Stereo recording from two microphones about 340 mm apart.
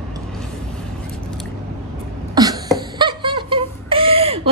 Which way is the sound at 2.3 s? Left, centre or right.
Centre.